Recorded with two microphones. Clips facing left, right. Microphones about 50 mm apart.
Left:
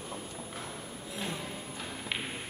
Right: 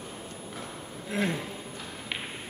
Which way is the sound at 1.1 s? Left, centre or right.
Right.